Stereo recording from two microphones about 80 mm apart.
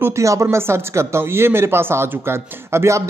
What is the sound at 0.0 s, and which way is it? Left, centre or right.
Speech, right.